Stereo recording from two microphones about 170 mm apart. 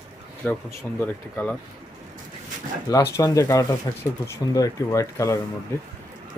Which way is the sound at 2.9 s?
20° left (ahead or behind).